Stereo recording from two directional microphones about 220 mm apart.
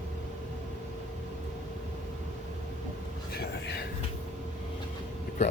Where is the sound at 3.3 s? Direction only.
50° left (ahead or behind).